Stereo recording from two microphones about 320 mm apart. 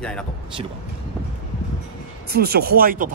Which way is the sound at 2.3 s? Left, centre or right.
Right.